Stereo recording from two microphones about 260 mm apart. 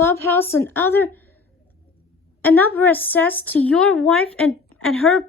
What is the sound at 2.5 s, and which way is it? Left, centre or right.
A woman's voice, centre.